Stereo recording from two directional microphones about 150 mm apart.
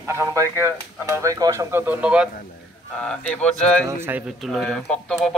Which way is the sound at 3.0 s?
5° left (ahead or behind).